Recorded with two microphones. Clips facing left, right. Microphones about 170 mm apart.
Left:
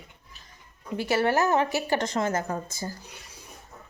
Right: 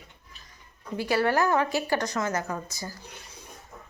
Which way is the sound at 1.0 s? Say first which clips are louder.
Even; 20° left (ahead or behind).